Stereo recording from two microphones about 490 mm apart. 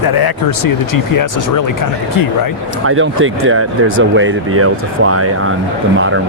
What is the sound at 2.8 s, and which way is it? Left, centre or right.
Speech, right.